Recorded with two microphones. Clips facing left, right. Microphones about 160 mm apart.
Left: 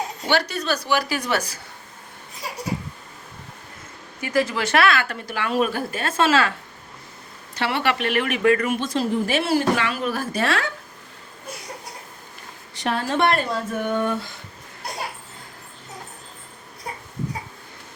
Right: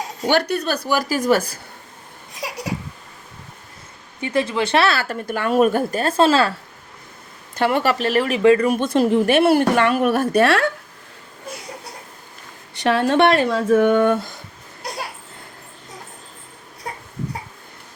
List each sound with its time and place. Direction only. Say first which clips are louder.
0.3 s a woman's voice: right 4 dB; 55° right (ahead or behind)
4.2 s speech: right 2 dB; 25° right (ahead or behind)
5.2 s a woman's voice: right 9 dB; 45° right (ahead or behind)
7.5 s speech: right 5 dB; 45° right (ahead or behind); by 8.7 s 30° right (ahead or behind)
8.7 s speech: right 6 dB; 55° right (ahead or behind)
12.7 s speech: right 7 dB; 70° right (ahead or behind)